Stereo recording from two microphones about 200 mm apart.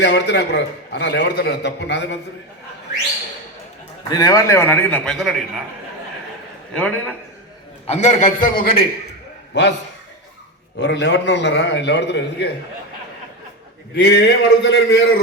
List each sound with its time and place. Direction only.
0.0 s a man's voice: 60° left (ahead or behind)
4.1 s a man's voice: 20° left (ahead or behind); by 5.6 s centre (ahead or behind)
6.7 s a man's voice: 5° left (ahead or behind)
7.9 s a man's voice: 35° left (ahead or behind)
9.5 s a man's voice: 60° left (ahead or behind)
10.8 s a man's voice: 60° left (ahead or behind)
13.9 s a man's voice: 55° left (ahead or behind)